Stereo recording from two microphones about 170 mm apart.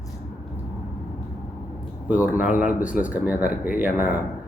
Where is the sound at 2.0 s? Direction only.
10° right (ahead or behind).